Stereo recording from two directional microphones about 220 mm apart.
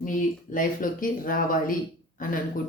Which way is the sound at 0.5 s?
35° left (ahead or behind).